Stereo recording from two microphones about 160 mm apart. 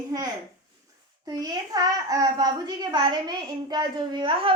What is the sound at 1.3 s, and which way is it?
A child's voice, 25° right (ahead or behind).